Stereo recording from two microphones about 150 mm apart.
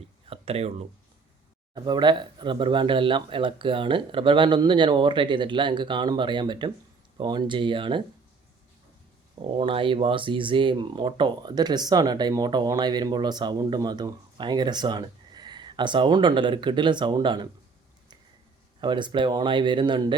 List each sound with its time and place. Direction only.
0.3 s speech: 45° right (ahead or behind)
1.7 s speech: 30° right (ahead or behind)
9.6 s speech: 35° right (ahead or behind)
18.8 s speech: 30° right (ahead or behind)